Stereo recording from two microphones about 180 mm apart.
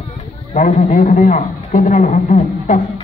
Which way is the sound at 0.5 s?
50° left (ahead or behind).